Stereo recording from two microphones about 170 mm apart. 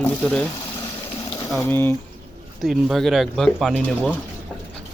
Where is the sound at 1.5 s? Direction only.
15° left (ahead or behind).